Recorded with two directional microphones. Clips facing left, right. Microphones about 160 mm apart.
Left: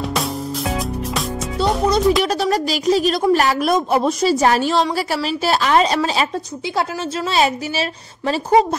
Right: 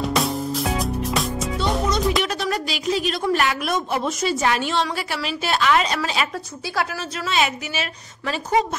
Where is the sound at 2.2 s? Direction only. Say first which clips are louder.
Left 6 dB; 35° left (ahead or behind).